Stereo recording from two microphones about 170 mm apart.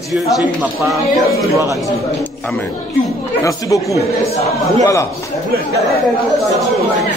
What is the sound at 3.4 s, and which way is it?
A man's voice, 20° left (ahead or behind).